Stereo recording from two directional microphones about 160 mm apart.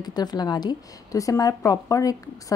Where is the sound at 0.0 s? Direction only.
25° left (ahead or behind).